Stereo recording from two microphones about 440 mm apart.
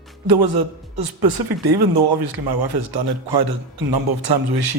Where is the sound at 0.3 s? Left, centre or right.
Right.